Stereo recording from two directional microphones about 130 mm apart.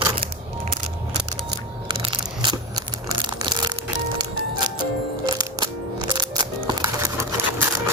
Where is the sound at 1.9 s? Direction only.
40° right (ahead or behind).